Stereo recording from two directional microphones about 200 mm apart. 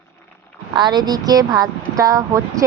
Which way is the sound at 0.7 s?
20° right (ahead or behind).